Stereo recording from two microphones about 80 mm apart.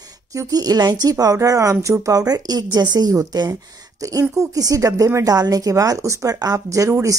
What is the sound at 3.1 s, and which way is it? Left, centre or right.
A woman's voice, right.